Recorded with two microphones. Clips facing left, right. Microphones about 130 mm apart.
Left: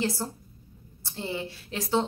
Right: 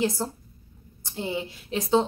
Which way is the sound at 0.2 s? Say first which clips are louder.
Right 3 dB; 25° right (ahead or behind).